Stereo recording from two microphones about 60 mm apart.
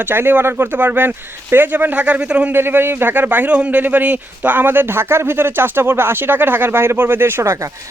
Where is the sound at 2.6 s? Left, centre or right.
Right.